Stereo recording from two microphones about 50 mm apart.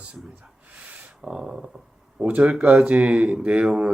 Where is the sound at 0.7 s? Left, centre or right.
Right.